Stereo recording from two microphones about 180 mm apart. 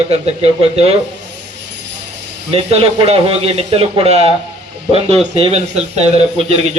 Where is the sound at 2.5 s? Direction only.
35° right (ahead or behind).